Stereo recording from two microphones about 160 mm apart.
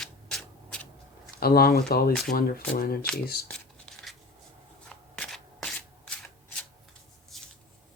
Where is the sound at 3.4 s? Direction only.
5° left (ahead or behind).